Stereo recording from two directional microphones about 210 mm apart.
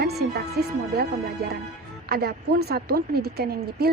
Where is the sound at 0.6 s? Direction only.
50° right (ahead or behind).